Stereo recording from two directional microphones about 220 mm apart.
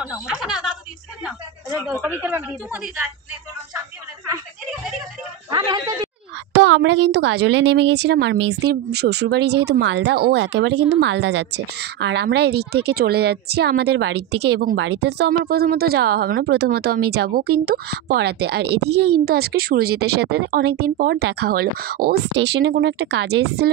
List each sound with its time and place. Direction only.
0.0 s a woman's voice: centre (ahead or behind)
5.5 s a sound: 15° right (ahead or behind)
6.5 s a woman's voice: 60° right (ahead or behind)